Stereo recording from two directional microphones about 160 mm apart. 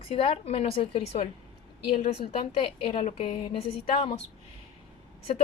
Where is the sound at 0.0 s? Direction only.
35° left (ahead or behind).